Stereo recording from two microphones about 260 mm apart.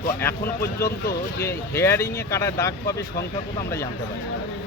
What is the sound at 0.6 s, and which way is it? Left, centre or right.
Speech, centre.